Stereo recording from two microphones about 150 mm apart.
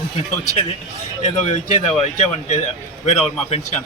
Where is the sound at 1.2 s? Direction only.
45° left (ahead or behind).